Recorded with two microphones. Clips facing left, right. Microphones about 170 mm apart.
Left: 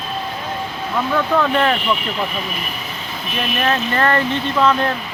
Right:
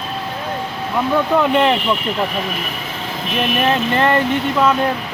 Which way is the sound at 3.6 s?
20° right (ahead or behind).